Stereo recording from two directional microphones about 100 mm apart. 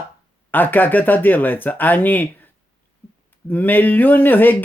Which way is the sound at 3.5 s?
20° left (ahead or behind).